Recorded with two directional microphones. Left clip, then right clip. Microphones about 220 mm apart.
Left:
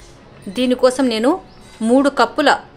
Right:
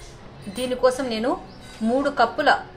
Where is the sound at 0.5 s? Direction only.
55° left (ahead or behind).